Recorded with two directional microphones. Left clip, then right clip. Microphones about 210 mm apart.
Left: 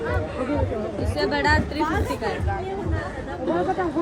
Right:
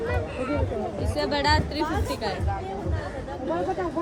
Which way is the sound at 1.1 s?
45° right (ahead or behind).